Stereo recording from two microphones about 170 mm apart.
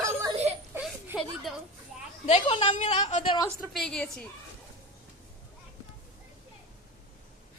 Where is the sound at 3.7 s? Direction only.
5° left (ahead or behind).